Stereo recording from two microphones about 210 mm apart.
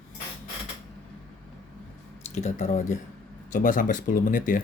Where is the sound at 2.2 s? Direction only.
30° left (ahead or behind).